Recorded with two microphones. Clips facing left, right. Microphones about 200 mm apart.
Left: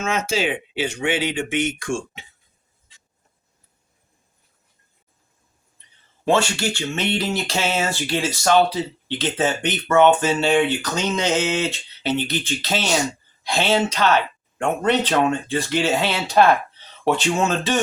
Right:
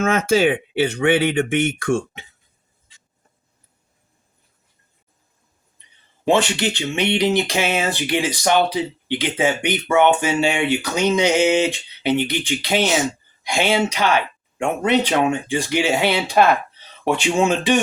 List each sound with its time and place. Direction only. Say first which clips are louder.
0.0 s speech: right 6 dB; 55° right (ahead or behind)
6.2 s speech: right 2 dB; 20° right (ahead or behind)